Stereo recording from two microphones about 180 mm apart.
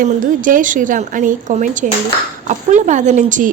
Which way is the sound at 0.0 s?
50° right (ahead or behind).